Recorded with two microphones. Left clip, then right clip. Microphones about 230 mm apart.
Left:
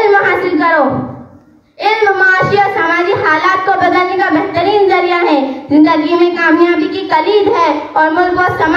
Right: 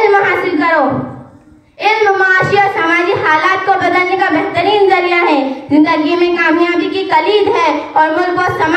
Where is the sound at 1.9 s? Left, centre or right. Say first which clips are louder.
Left 1 dB; right.